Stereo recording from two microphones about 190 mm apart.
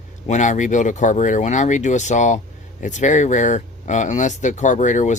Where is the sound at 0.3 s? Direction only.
40° left (ahead or behind).